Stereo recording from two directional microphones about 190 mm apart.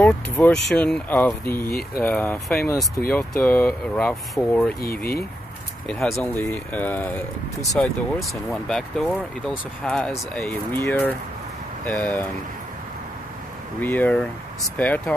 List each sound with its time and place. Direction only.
0.0 s speech: 5° left (ahead or behind)
4.8 s speech: 55° left (ahead or behind)
5.9 s speech: centre (ahead or behind)
6.1 s speech: 10° left (ahead or behind)
13.7 s speech: 10° left (ahead or behind)